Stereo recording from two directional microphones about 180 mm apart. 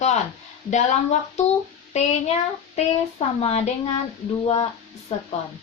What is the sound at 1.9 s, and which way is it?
Speech, 40° left (ahead or behind).